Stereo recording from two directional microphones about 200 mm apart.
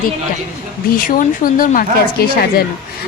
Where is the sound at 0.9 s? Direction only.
45° left (ahead or behind).